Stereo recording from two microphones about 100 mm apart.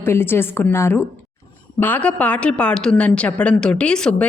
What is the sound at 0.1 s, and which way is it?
A woman's voice, 25° left (ahead or behind).